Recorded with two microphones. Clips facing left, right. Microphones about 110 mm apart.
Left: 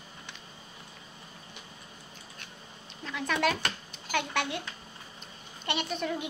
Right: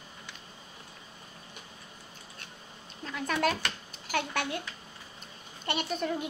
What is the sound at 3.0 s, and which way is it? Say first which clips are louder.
A child's voice: even; 40° right (ahead or behind).